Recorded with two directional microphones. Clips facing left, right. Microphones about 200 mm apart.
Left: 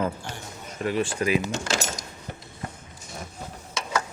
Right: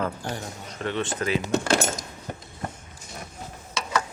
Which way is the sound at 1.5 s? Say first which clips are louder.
Right 6 dB; 55° right (ahead or behind).